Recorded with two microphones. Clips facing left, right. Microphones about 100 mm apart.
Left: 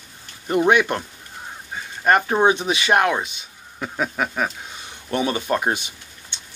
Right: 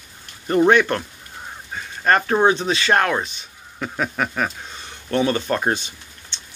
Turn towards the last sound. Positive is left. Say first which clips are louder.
# even
turn(degrees=15)  # may be behind; listen again after turning